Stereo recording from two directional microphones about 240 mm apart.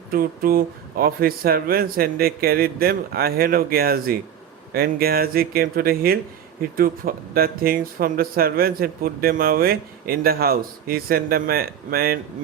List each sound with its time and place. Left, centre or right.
0.1 s speech: right